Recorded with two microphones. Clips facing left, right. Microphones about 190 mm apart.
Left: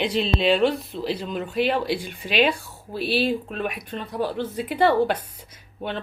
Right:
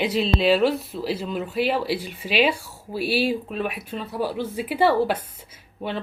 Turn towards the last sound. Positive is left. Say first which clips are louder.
# right 1 dB
turn(degrees=-5)  # may be behind; listen again after turning